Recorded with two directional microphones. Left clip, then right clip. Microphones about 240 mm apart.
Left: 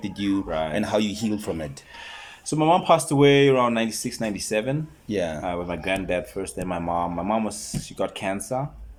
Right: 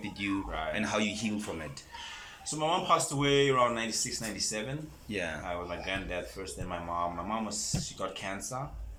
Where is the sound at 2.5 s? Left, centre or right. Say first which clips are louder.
Left 10 dB; left.